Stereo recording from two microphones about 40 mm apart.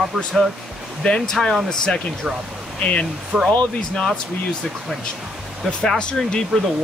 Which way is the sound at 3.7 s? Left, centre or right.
Centre.